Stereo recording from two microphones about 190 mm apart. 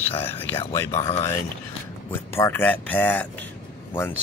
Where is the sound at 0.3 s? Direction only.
10° left (ahead or behind).